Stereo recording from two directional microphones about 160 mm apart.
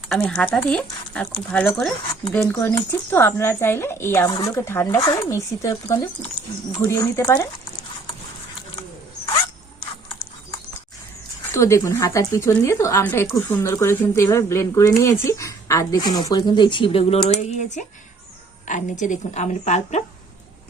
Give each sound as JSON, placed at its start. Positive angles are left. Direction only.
{"t": 0.1, "sound": "a woman's voice", "side_deg": 5}
{"t": 9.2, "sound": "zipper", "side_deg": 25}
{"t": 11.5, "sound": "a woman's voice", "side_deg": 20}